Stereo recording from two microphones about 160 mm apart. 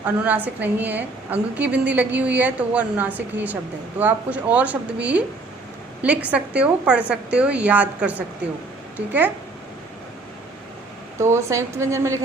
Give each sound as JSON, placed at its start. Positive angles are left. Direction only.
{"t": 0.0, "sound": "a woman's voice", "side_deg": -10}
{"t": 11.2, "sound": "speech", "side_deg": -20}